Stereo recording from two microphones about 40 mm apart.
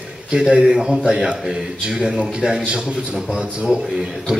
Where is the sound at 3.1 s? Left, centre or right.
Centre.